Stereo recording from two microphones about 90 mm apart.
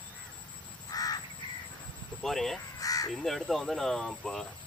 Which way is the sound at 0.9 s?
45° left (ahead or behind).